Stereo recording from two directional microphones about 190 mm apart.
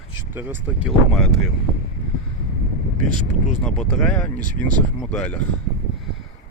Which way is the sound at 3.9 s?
Centre (ahead or behind).